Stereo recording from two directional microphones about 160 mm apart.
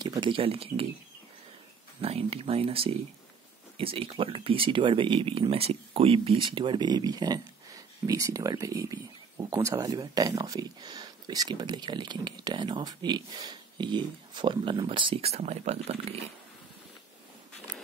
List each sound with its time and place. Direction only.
0.0 s speech: 30° right (ahead or behind)
2.0 s speech: 40° right (ahead or behind)